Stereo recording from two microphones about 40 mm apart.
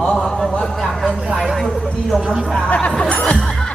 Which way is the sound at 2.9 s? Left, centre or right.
Left.